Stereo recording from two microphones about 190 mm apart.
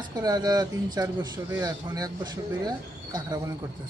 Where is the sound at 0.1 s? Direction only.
20° right (ahead or behind).